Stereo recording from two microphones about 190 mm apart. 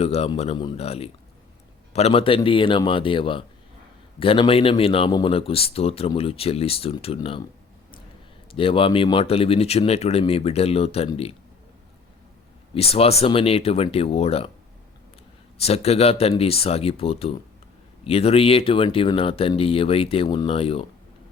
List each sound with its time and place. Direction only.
0.0 s speech: 35° left (ahead or behind)
8.5 s speech: 30° left (ahead or behind)
12.7 s speech: 30° left (ahead or behind)
15.5 s speech: 35° left (ahead or behind)